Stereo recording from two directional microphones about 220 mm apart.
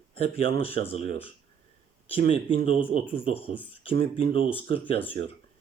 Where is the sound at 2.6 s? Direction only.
25° left (ahead or behind).